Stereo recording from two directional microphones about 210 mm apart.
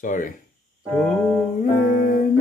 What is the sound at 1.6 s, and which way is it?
Music, 35° left (ahead or behind).